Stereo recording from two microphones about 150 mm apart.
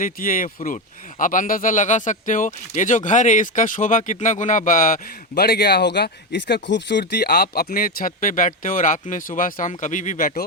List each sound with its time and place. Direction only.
0.0 s speech: 65° left (ahead or behind)